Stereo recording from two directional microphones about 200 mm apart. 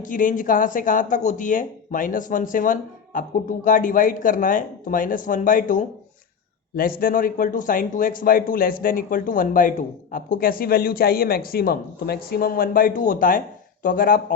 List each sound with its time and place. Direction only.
0.0 s speech: 40° left (ahead or behind)
7.0 s a man's voice: 45° left (ahead or behind)